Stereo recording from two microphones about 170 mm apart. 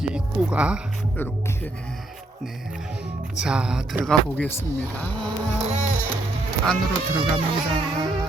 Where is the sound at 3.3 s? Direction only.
5° right (ahead or behind).